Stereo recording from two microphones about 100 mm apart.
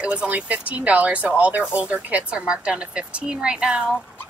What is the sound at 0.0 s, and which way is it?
Speech, 10° right (ahead or behind).